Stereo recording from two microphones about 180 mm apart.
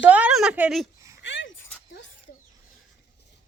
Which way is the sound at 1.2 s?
90° left.